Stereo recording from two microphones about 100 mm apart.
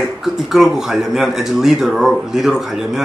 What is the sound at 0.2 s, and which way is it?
Speech, 5° right (ahead or behind).